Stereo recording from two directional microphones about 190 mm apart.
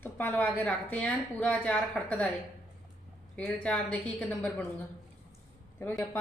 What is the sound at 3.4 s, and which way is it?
A woman's voice, 5° left (ahead or behind).